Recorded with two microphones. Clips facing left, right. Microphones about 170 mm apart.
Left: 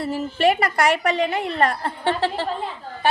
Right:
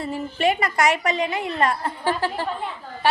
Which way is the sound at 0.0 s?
70° left (ahead or behind).